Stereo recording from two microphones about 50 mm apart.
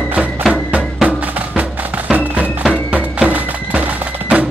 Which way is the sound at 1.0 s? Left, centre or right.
Right.